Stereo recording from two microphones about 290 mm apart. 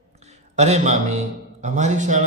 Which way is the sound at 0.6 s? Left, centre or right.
Right.